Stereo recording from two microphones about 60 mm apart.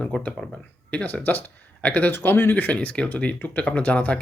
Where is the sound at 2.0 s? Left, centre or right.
Left.